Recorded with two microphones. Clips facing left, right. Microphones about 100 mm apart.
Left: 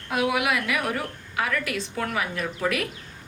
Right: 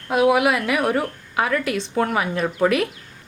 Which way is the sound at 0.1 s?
30° right (ahead or behind).